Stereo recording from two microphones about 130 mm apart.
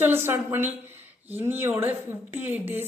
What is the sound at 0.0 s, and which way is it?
A woman's voice, 15° right (ahead or behind).